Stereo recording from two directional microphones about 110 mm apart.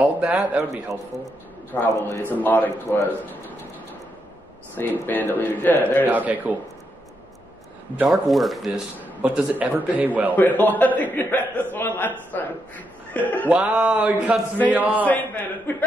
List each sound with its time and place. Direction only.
0.0 s a man's voice: 10° right (ahead or behind)
1.7 s a man's voice: 20° left (ahead or behind)
4.7 s a man's voice: 15° left (ahead or behind)
6.0 s a man's voice: 15° right (ahead or behind)
8.0 s speech: centre (ahead or behind)
9.2 s a man's voice: 15° right (ahead or behind)
10.3 s a man's voice: 15° left (ahead or behind)
13.5 s a man's voice: 10° right (ahead or behind)
15.0 s a man's voice: 15° left (ahead or behind)